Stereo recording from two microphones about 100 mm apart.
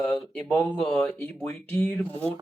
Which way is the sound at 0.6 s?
20° left (ahead or behind).